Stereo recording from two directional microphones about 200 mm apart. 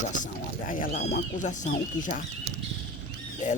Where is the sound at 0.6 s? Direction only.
45° left (ahead or behind).